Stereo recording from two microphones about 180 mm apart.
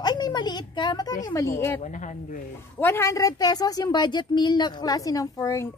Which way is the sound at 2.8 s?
15° left (ahead or behind).